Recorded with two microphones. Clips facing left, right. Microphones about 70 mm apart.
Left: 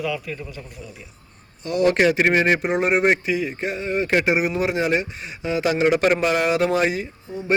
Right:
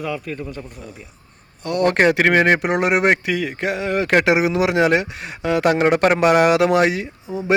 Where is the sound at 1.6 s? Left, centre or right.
Right.